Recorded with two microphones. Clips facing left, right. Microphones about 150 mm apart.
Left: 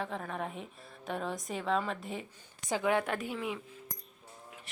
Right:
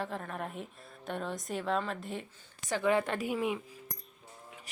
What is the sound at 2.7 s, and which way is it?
Speech, 10° left (ahead or behind).